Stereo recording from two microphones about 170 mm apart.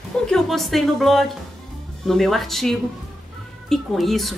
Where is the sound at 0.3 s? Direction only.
Centre (ahead or behind).